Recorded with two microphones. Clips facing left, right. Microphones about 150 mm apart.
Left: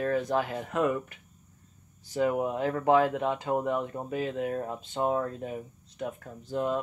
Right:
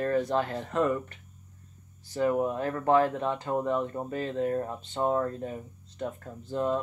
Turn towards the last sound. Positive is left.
turn(degrees=5)  # may be behind; listen again after turning